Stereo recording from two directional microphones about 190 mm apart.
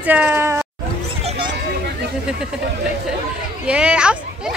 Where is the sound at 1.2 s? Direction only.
35° right (ahead or behind).